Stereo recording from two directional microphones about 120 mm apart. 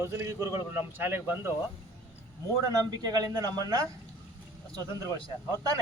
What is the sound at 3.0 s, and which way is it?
Speech, 30° right (ahead or behind).